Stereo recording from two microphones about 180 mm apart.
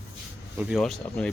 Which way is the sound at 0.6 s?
Centre (ahead or behind).